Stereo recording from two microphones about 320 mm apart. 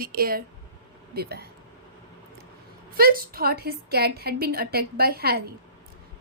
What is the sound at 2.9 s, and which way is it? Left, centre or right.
A woman's voice, right.